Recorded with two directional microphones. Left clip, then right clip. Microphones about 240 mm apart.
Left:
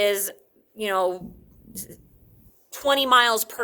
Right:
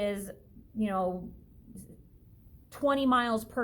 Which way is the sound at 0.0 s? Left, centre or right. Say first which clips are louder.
Left 11 dB; left.